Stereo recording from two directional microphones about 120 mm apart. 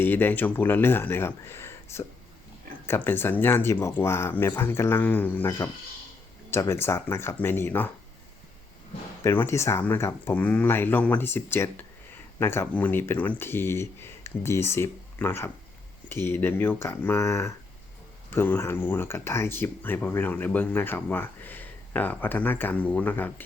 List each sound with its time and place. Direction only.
0.0 s speech: 15° left (ahead or behind)
9.2 s speech: 20° left (ahead or behind)